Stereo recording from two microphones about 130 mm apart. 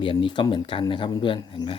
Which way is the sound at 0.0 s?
40° left (ahead or behind).